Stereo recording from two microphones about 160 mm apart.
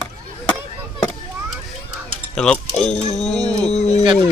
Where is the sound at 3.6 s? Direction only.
45° left (ahead or behind).